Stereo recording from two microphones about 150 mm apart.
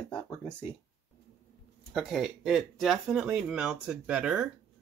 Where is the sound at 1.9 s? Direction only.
5° right (ahead or behind).